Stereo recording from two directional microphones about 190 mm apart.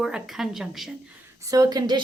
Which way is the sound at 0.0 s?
5° right (ahead or behind).